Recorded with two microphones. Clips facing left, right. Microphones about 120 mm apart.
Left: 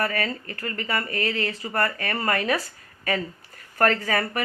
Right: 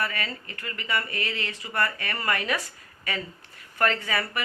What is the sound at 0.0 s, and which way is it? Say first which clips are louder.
Speech: left 5 dB; 40° left (ahead or behind).